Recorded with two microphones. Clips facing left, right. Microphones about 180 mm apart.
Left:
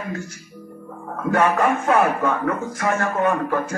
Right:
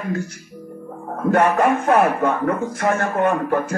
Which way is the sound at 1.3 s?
60° right (ahead or behind).